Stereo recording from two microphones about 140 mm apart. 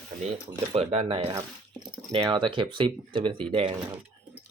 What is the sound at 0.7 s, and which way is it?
Speech, 45° right (ahead or behind).